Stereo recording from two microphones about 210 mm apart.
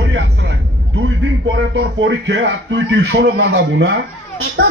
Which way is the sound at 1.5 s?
65° right (ahead or behind).